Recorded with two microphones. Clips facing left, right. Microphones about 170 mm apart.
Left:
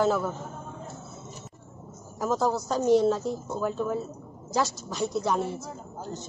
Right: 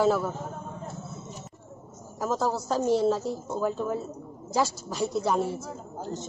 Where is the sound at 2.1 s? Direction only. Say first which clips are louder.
Left 2 dB; 5° right (ahead or behind).